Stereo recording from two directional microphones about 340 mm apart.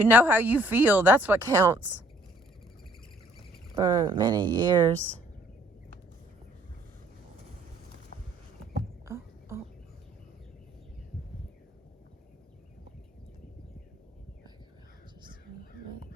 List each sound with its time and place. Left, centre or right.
0.0 s speech: centre
3.8 s speech: centre
9.0 s whispering: centre